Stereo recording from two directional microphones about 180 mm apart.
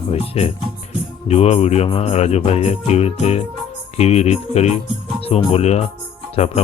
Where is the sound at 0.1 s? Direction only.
35° left (ahead or behind).